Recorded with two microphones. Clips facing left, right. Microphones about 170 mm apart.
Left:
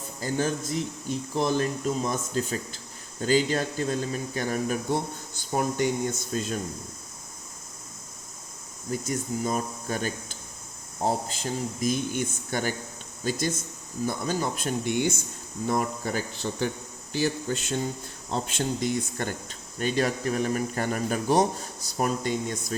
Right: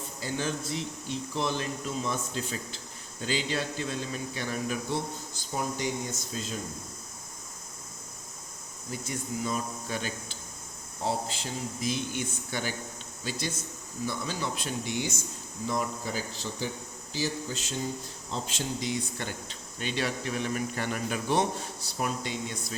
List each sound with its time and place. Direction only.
0.2 s speech: 45° left (ahead or behind)
8.9 s speech: 45° left (ahead or behind)